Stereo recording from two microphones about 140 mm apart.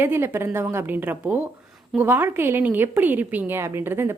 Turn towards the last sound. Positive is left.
turn(degrees=-15)  # may be behind; listen again after turning